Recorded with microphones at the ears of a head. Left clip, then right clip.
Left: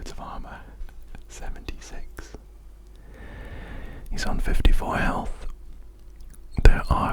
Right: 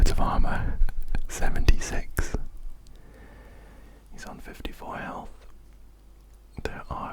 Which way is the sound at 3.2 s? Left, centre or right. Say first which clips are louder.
Left 12 dB; left.